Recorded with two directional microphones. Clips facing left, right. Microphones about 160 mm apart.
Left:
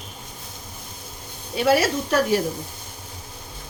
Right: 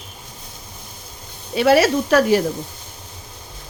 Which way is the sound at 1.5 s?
85° right.